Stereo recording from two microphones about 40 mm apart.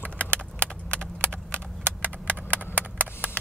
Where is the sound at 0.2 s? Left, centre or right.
Left.